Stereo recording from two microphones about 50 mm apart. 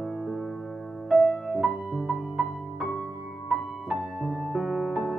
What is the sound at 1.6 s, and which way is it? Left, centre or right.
Music, centre.